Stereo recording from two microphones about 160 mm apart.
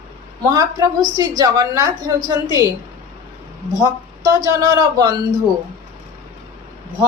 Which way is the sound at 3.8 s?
25° right (ahead or behind).